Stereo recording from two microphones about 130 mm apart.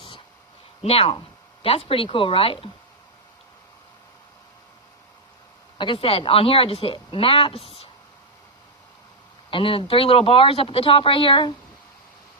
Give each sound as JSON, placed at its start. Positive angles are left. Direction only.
{"t": 0.9, "sound": "speech", "side_deg": 50}
{"t": 5.7, "sound": "speech", "side_deg": 40}
{"t": 9.5, "sound": "speech", "side_deg": 40}